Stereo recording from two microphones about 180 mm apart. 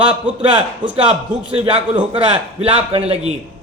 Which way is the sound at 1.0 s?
5° right (ahead or behind).